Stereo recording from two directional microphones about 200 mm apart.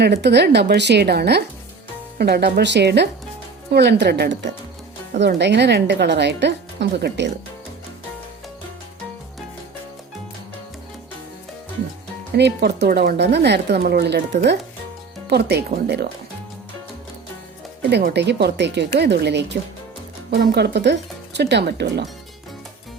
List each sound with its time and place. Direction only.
0.0 s speech: 55° right (ahead or behind)
5.4 s speech: 60° right (ahead or behind)
12.4 s speech: 55° right (ahead or behind)
17.8 s speech: 55° right (ahead or behind)